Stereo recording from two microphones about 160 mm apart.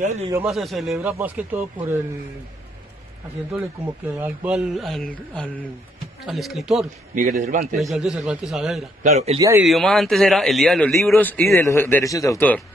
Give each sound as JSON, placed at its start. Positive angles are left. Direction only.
{"t": 0.0, "sound": "speech", "side_deg": -45}
{"t": 0.5, "sound": "speech", "side_deg": 0}
{"t": 4.2, "sound": "speech", "side_deg": -10}
{"t": 4.7, "sound": "speech", "side_deg": 0}
{"t": 7.2, "sound": "a man's voice", "side_deg": -55}
{"t": 7.7, "sound": "speech", "side_deg": 0}
{"t": 9.0, "sound": "speech", "side_deg": -45}
{"t": 9.6, "sound": "a man's voice", "side_deg": 0}